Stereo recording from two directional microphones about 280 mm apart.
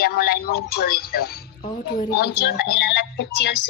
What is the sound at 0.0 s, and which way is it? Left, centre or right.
Speech, left.